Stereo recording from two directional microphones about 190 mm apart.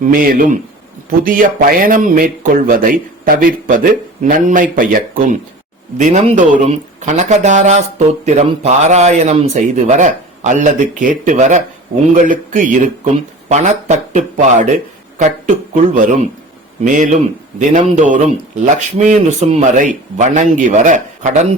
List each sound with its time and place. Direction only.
0.1 s speech: 50° right (ahead or behind)